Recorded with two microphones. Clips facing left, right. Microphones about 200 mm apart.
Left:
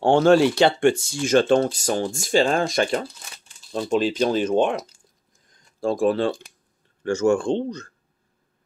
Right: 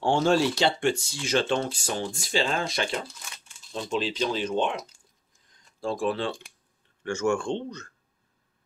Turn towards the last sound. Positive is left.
turn(degrees=35)  # may be behind; listen again after turning